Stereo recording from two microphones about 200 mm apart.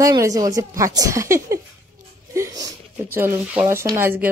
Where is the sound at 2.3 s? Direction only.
15° right (ahead or behind).